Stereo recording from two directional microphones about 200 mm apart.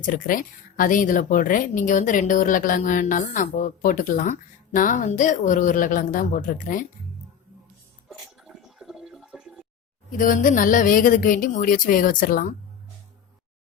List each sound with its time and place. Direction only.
0.0 s speech: 40° left (ahead or behind)
8.4 s a sound: centre (ahead or behind)
10.1 s speech: 45° left (ahead or behind)